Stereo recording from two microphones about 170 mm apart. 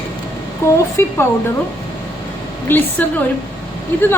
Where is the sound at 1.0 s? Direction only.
15° left (ahead or behind).